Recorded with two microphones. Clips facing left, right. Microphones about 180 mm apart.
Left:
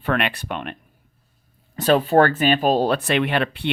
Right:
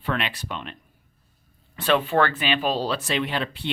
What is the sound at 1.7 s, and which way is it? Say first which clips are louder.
Speech: left 5 dB; 40° left (ahead or behind).